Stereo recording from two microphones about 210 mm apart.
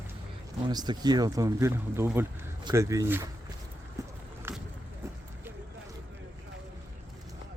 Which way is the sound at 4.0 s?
15° right (ahead or behind).